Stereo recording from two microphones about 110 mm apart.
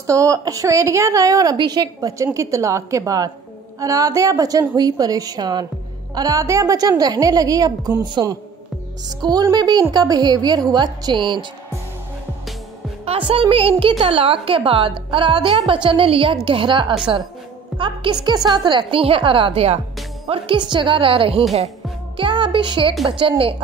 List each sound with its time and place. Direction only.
0.0 s a woman's voice: 30° right (ahead or behind)
13.0 s a woman's voice: 60° right (ahead or behind)
20.2 s a woman's voice: 50° right (ahead or behind)